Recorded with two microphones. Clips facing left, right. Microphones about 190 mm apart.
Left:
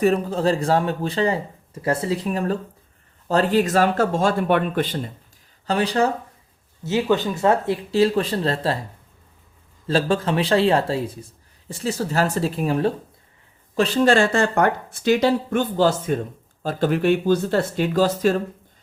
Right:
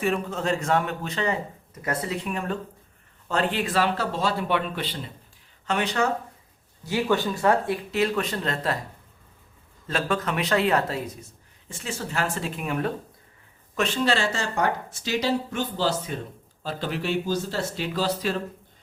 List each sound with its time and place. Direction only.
0.0 s speech: 35° left (ahead or behind)
5.6 s speech: 35° left (ahead or behind)
6.8 s speech: 20° left (ahead or behind)
9.8 s speech: 30° left (ahead or behind); by 18.4 s 45° left (ahead or behind)